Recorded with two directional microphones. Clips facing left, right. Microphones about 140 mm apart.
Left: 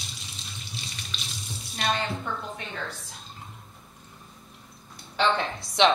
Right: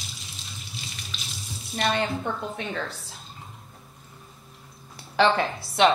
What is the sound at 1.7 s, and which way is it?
Speech, 60° right (ahead or behind).